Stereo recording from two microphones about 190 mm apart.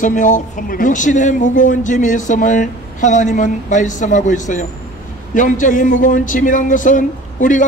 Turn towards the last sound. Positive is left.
turn(degrees=45)  # may be behind; listen again after turning